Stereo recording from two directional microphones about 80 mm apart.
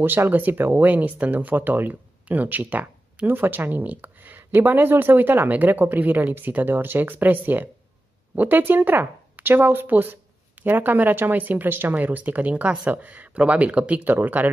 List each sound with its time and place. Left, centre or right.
0.0 s speech: right